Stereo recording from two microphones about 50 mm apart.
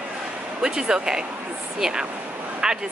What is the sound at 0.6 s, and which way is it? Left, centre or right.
Speech, centre.